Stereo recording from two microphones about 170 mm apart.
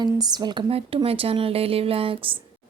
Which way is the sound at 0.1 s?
25° right (ahead or behind).